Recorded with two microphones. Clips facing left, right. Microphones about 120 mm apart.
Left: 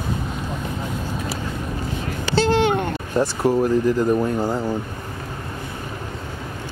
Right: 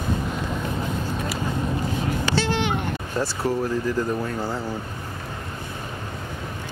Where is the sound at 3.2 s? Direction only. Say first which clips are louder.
Left 6 dB; 15° left (ahead or behind).